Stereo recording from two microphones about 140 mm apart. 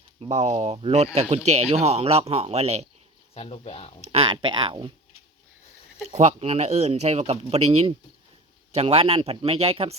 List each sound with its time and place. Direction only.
0.2 s speech: 50° right (ahead or behind)
3.3 s speech: 45° left (ahead or behind)
4.0 s speech: 45° right (ahead or behind)
6.1 s speech: 50° right (ahead or behind)